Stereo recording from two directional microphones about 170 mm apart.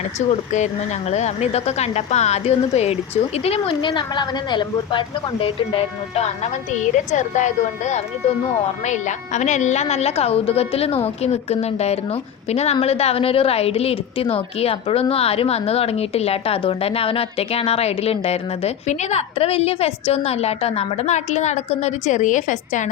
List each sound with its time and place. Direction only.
0.2 s a woman's voice: 45° left (ahead or behind)